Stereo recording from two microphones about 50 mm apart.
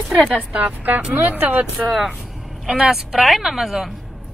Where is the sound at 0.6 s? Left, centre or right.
Right.